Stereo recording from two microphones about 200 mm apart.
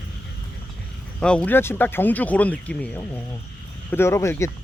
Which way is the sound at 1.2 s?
5° left (ahead or behind).